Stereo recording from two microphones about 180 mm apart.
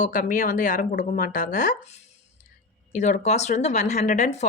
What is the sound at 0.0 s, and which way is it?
A woman's voice, 45° left (ahead or behind).